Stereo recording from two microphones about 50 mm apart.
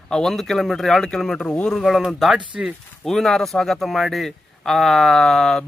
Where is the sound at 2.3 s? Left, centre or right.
Centre.